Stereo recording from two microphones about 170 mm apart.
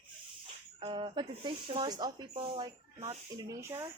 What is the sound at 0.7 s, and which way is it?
Speech, 30° right (ahead or behind).